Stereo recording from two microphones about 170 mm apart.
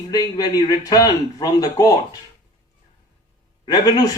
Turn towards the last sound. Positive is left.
turn(degrees=25)  # may be behind; listen again after turning